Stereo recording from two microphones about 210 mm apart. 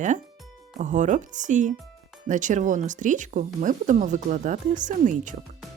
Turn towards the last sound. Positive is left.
turn(degrees=-35)  # may be behind; listen again after turning